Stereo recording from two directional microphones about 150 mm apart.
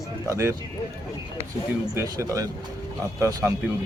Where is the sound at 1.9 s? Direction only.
20° right (ahead or behind).